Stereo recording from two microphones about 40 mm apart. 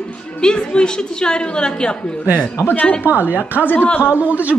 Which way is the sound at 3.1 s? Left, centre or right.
Right.